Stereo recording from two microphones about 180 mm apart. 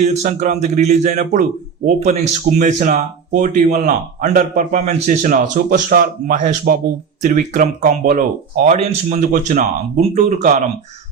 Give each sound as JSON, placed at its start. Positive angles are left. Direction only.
{"t": 0.0, "sound": "speech", "side_deg": -40}